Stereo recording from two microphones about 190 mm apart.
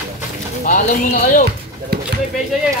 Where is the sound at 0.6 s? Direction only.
45° left (ahead or behind).